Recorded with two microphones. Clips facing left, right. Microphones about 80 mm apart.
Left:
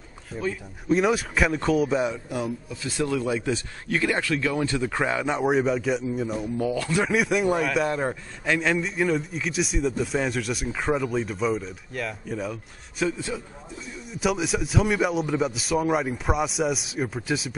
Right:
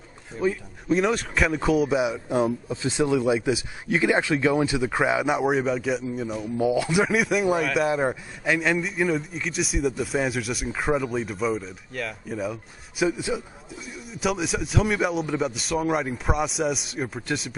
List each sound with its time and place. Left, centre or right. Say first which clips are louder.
0.3 s speech: right 4 dB; centre
0.8 s a man's voice: left 1 dB; centre
2.2 s speech: right 6 dB; right; by 6.5 s centre
6.6 s speech: right 4 dB; centre
7.1 s a man's voice: even; centre
13.0 s speech: right 3 dB; centre
13.9 s a man's voice: left 1 dB; centre